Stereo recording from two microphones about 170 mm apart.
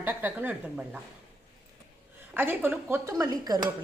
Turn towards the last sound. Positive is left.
turn(degrees=-20)  # may be behind; listen again after turning